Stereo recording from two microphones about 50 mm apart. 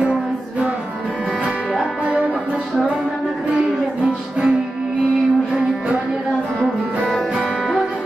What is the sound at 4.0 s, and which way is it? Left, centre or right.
Music, centre.